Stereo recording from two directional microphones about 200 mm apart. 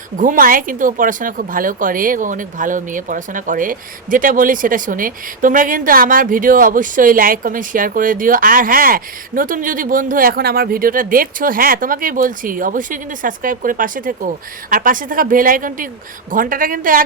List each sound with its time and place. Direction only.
0.2 s speech: 45° right (ahead or behind)